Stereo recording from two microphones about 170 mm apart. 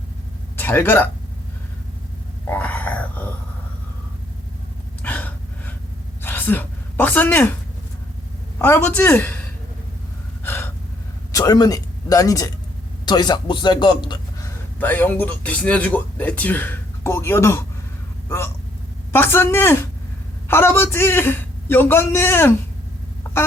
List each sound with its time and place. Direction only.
0.5 s speech: 10° left (ahead or behind)
2.5 s a sound: 10° left (ahead or behind)
5.0 s gasp: 10° left (ahead or behind)
6.2 s a sound: 10° left (ahead or behind)
8.6 s speech: 10° left (ahead or behind)
10.4 s gasp: 15° left (ahead or behind)
11.3 s a man's voice: 20° left (ahead or behind)
14.8 s speech: 10° left (ahead or behind)
23.3 s a sound: 10° left (ahead or behind)